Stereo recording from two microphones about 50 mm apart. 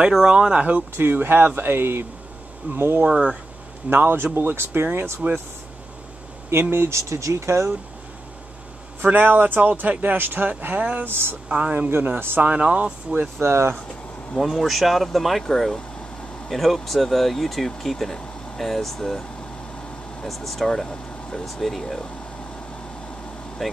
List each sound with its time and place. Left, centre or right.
0.1 s speech: centre
0.9 s speech: right
3.1 s speech: centre
3.9 s speech: right
6.7 s speech: right
7.0 s speech: right
9.0 s speech: right
11.1 s speech: right
12.4 s speech: right
13.4 s speech: right
14.4 s speech: centre
20.2 s speech: centre
23.6 s speech: centre